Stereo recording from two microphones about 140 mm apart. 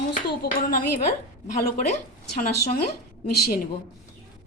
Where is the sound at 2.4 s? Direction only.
85° left.